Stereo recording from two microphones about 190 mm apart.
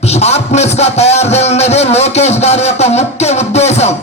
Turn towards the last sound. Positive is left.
turn(degrees=35)  # may be behind; listen again after turning